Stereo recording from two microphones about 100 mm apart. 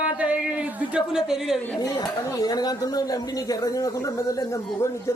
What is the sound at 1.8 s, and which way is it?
Speech, 40° left (ahead or behind).